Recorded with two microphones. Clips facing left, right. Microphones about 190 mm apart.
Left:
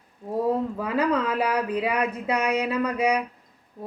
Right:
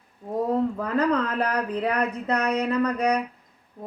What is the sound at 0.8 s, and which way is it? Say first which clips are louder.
Speech: right 1 dB; 10° left (ahead or behind).